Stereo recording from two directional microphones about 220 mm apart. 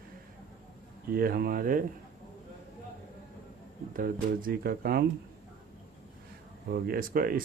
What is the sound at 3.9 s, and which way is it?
Speech, 40° right (ahead or behind).